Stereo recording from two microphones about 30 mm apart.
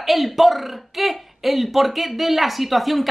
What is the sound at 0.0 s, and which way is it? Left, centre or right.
A woman's voice, centre.